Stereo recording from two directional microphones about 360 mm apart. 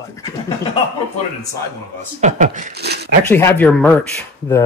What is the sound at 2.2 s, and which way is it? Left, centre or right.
Speech, right.